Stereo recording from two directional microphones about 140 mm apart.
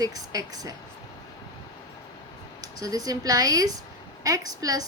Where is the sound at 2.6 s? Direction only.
25° right (ahead or behind).